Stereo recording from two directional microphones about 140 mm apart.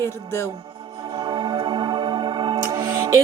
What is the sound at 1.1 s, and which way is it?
Music, 35° right (ahead or behind).